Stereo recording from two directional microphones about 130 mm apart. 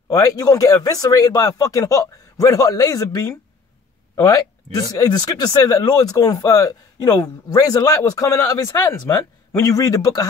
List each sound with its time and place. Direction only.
0.1 s speech: 30° left (ahead or behind)